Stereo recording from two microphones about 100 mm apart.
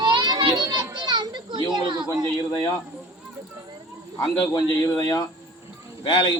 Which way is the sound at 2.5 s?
45° left (ahead or behind).